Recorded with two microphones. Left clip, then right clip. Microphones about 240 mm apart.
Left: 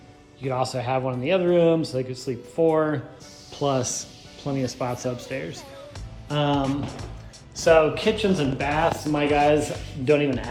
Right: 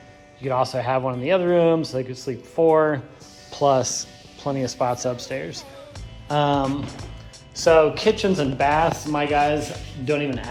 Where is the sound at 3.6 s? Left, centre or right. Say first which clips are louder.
Right 6 dB; right.